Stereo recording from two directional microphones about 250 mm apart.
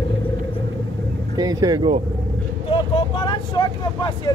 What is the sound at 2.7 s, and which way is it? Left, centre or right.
Vehicle, centre.